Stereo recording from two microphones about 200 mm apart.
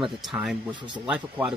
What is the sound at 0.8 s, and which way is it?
Speech, 25° right (ahead or behind).